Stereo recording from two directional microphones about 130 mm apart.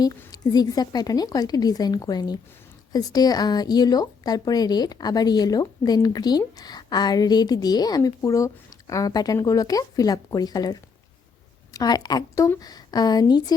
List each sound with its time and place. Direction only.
0.3 s a woman's voice: 30° left (ahead or behind)